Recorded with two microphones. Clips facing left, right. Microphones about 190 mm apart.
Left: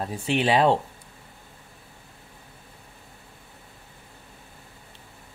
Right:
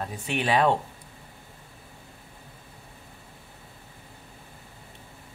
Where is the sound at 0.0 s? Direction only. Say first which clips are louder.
Left 5 dB; 30° left (ahead or behind).